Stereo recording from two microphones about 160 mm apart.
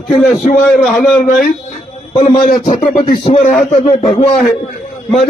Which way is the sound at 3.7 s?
40° left (ahead or behind).